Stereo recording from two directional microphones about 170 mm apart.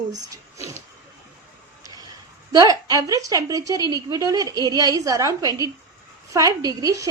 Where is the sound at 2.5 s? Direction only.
25° right (ahead or behind).